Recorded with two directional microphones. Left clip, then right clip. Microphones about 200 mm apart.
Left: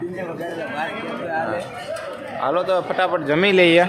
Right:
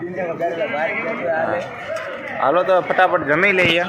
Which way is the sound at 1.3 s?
Centre (ahead or behind).